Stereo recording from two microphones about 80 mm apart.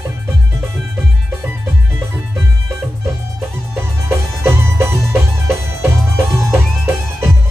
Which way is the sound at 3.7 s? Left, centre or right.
Right.